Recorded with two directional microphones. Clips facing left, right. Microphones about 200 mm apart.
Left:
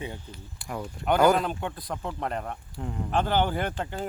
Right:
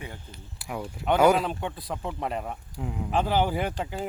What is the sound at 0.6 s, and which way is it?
A man's voice, 5° right (ahead or behind).